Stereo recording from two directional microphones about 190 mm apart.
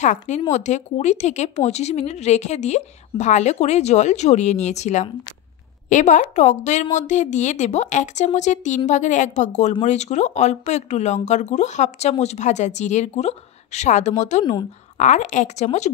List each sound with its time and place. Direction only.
0.0 s a woman's voice: 40° left (ahead or behind)
14.4 s speech: 25° left (ahead or behind)
15.0 s a woman's voice: 40° left (ahead or behind)